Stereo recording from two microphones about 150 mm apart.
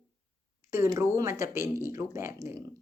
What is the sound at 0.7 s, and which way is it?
Speech, 20° right (ahead or behind).